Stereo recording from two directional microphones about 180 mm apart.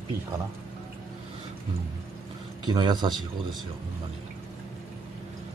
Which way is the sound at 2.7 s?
25° right (ahead or behind).